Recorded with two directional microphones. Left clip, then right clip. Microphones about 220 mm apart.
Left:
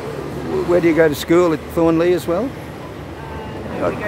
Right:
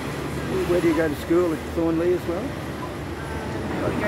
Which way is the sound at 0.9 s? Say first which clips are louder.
Left 8 dB; 50° left (ahead or behind).